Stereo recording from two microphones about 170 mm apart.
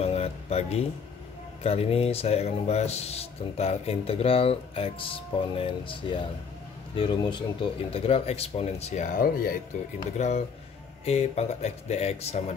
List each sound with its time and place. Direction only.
0.0 s music: 35° left (ahead or behind)
1.6 s speech: 35° left (ahead or behind); by 9.6 s 60° left (ahead or behind)
10.1 s speech: 40° left (ahead or behind)